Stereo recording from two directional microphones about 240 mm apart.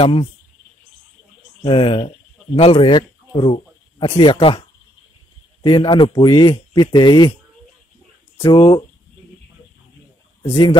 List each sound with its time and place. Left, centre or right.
0.0 s a man's voice: left
1.6 s a man's voice: left
8.4 s speech: centre
10.5 s a man's voice: left